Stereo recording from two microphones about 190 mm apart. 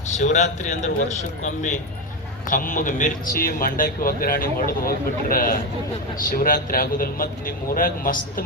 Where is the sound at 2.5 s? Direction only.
45° left (ahead or behind).